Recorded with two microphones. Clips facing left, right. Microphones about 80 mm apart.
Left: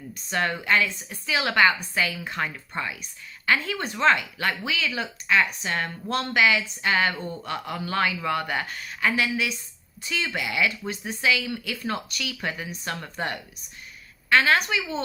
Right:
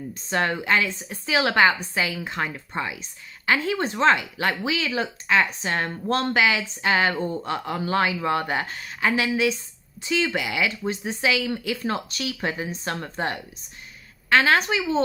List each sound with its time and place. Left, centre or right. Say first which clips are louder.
0.1 s a woman's voice: right 2 dB; right